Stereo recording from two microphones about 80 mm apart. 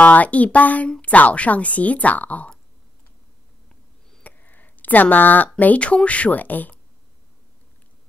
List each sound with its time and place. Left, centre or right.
0.0 s a woman's voice: centre
4.2 s speech: left